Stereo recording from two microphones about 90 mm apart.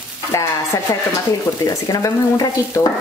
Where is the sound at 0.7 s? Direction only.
40° left (ahead or behind).